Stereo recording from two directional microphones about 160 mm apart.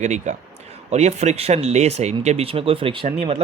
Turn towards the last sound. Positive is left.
turn(degrees=-35)  # may be behind; listen again after turning